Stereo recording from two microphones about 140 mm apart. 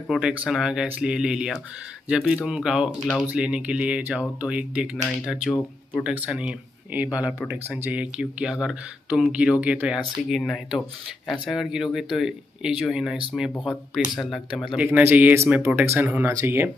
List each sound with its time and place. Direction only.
0.1 s speech: 5° right (ahead or behind)
10.4 s speech: 5° left (ahead or behind)
14.8 s speech: 15° right (ahead or behind)